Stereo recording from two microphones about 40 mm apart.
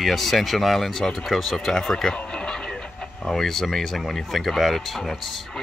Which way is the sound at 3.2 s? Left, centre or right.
Centre.